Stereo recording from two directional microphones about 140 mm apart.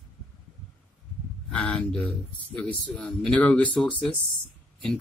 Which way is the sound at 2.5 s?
10° left (ahead or behind).